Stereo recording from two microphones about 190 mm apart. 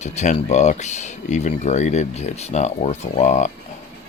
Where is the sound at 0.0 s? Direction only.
40° left (ahead or behind).